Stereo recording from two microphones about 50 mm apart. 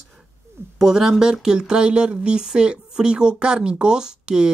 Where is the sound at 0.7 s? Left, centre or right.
Centre.